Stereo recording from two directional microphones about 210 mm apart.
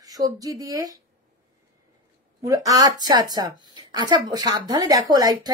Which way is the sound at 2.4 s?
15° right (ahead or behind).